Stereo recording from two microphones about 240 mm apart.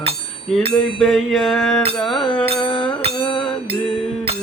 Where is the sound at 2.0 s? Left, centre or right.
Centre.